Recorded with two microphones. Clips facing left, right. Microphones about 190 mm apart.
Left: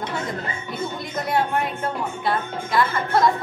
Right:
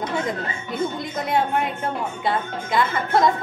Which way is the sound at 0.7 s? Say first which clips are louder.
Right 6 dB; 20° right (ahead or behind).